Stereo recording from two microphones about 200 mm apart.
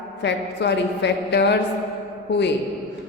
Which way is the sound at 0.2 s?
60° left (ahead or behind).